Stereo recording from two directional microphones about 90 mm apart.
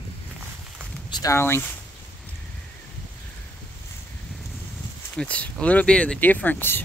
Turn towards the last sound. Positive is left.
turn(degrees=20)  # may be behind; listen again after turning